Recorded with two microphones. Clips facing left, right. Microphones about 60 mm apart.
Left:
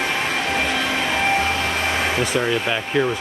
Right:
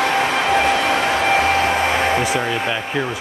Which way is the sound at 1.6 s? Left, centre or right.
Right.